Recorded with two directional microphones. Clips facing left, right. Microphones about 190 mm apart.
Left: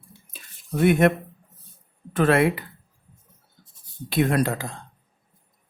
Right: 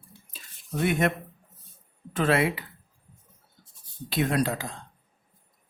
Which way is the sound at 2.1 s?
55° left (ahead or behind).